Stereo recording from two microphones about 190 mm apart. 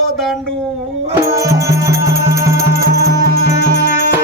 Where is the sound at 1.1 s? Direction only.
15° right (ahead or behind).